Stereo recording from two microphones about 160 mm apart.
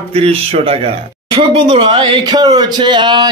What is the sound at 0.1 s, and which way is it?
Speech, 40° right (ahead or behind).